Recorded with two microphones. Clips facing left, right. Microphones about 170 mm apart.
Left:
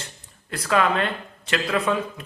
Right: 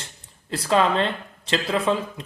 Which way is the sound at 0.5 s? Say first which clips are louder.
Right 1 dB; 25° right (ahead or behind).